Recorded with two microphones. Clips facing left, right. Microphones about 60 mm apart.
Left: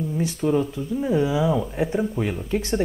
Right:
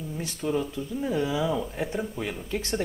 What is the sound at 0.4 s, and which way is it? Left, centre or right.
Speech, centre.